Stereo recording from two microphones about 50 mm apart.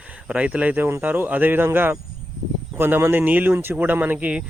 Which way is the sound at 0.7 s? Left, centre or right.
Right.